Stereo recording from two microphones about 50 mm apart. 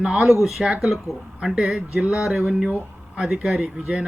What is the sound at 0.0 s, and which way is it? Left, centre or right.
Speech, centre.